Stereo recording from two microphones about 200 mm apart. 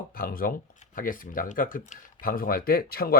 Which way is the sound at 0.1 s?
45° left (ahead or behind).